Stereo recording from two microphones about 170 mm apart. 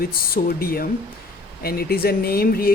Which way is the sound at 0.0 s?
60° left (ahead or behind).